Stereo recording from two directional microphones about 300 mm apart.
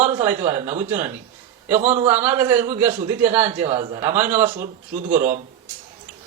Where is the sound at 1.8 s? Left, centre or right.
Right.